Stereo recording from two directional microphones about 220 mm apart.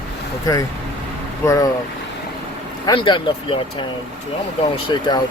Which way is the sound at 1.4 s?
15° left (ahead or behind).